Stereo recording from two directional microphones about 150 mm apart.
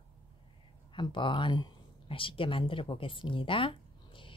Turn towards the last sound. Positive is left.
turn(degrees=35)  # may be behind; listen again after turning